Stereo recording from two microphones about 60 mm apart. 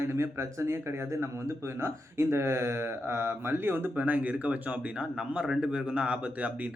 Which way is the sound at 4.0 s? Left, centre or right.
Right.